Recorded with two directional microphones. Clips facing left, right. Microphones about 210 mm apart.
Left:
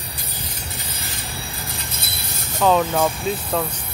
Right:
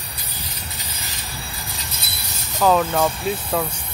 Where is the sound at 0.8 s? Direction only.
50° left (ahead or behind).